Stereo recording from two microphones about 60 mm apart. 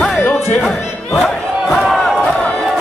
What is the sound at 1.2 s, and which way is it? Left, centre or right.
Battle cry, centre.